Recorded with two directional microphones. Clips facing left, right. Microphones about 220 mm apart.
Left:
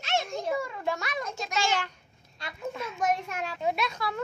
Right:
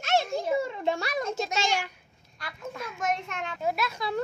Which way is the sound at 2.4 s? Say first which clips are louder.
Even; 25° left (ahead or behind).